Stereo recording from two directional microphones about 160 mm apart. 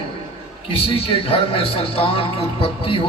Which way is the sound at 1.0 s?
35° left (ahead or behind).